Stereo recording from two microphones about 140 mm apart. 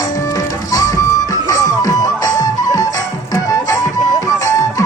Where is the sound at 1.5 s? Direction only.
25° left (ahead or behind).